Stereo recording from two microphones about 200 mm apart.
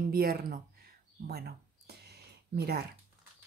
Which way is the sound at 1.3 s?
50° right (ahead or behind).